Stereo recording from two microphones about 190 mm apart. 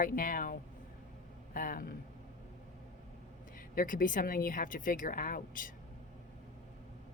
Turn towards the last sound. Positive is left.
turn(degrees=45)  # may be behind; listen again after turning